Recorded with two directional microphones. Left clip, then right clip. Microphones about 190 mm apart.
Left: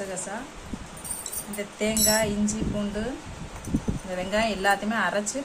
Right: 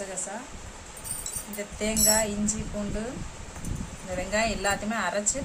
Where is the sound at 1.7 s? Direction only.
5° right (ahead or behind).